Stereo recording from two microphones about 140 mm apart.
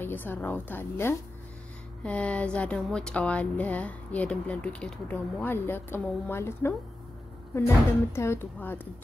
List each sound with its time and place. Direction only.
0.0 s speech: 15° left (ahead or behind)